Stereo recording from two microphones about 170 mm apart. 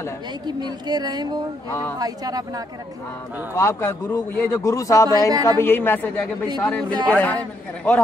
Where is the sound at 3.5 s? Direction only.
15° left (ahead or behind).